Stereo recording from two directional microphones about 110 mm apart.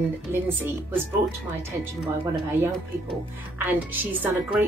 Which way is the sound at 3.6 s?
15° right (ahead or behind).